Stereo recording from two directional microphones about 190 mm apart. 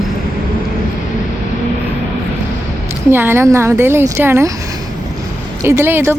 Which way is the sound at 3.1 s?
10° right (ahead or behind).